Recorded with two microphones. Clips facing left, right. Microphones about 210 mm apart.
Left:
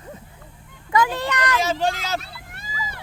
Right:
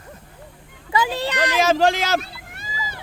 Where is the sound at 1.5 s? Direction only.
90° right.